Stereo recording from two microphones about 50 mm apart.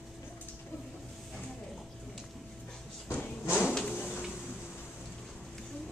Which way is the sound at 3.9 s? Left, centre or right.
Left.